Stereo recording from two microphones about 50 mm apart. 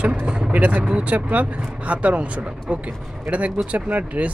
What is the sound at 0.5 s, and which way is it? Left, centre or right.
Speech, right.